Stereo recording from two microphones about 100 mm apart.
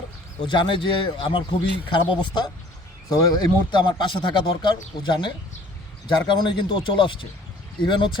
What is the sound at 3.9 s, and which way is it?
Speech, 55° left (ahead or behind).